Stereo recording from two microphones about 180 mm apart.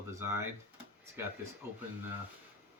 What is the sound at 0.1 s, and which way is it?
Speech, 15° right (ahead or behind).